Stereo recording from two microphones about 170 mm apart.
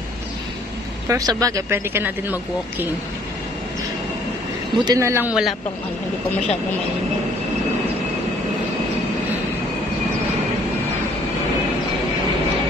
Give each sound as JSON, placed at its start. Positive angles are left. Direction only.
{"t": 1.0, "sound": "speech", "side_deg": -20}
{"t": 4.8, "sound": "speech", "side_deg": -20}
{"t": 5.3, "sound": "a man's voice", "side_deg": 0}